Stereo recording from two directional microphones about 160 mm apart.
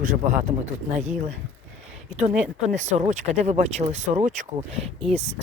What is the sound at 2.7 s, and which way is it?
Speech, 45° right (ahead or behind).